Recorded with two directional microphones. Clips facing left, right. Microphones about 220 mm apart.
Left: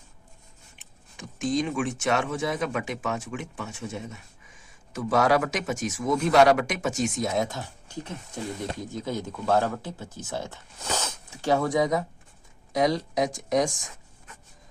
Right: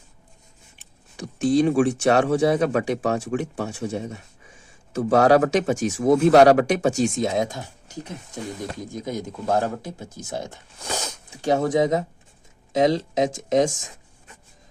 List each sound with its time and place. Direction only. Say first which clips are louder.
1.1 s speech: right 7 dB; 35° right (ahead or behind)
8.9 s speech: right 2 dB; 15° right (ahead or behind)